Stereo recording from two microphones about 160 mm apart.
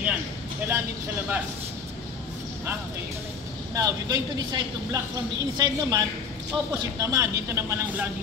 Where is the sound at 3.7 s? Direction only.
25° right (ahead or behind).